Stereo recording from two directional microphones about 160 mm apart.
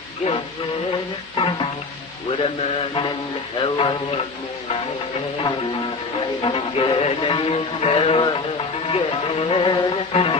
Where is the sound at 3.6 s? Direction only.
35° left (ahead or behind).